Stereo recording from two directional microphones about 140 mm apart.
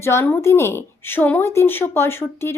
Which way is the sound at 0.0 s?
20° left (ahead or behind).